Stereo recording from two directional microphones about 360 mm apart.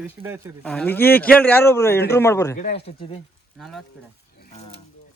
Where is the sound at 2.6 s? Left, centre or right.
Centre.